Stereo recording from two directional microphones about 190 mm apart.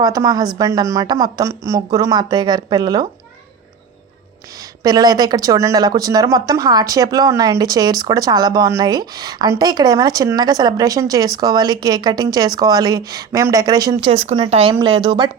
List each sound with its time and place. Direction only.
0.0 s speech: 20° right (ahead or behind)
4.8 s speech: 20° right (ahead or behind)
14.1 s speech: 30° right (ahead or behind)